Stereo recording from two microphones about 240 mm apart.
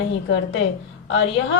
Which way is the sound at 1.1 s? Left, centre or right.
Left.